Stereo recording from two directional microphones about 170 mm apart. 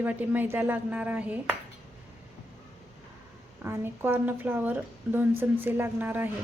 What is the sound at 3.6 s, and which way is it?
Speech, 15° right (ahead or behind).